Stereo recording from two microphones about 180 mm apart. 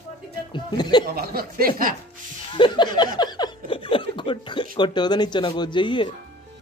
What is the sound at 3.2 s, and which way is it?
Snicker, 25° left (ahead or behind).